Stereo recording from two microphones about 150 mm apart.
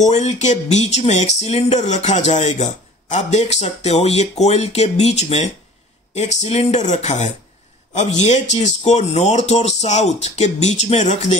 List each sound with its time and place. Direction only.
0.0 s speech: 50° left (ahead or behind)